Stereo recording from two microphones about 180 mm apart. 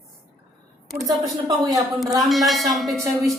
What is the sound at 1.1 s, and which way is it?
Speech, 20° right (ahead or behind).